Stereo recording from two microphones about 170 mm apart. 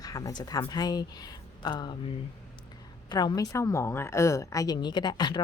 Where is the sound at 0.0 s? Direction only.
20° left (ahead or behind).